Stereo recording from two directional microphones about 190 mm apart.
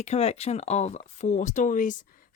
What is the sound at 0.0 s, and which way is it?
Speech, 35° left (ahead or behind).